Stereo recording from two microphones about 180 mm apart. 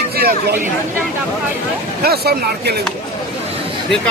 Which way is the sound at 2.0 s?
60° right (ahead or behind).